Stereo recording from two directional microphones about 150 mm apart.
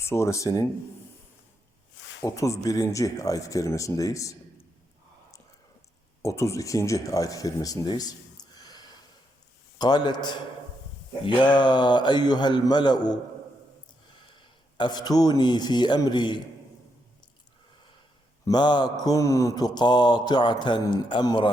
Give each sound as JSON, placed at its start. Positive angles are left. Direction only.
{"t": 0.0, "sound": "mantra", "side_deg": 20}
{"t": 2.2, "sound": "mantra", "side_deg": 20}
{"t": 6.2, "sound": "speech", "side_deg": 20}
{"t": 9.7, "sound": "mantra", "side_deg": 30}
{"t": 11.3, "sound": "mantra", "side_deg": 30}
{"t": 14.8, "sound": "mantra", "side_deg": 30}
{"t": 18.4, "sound": "mantra", "side_deg": 30}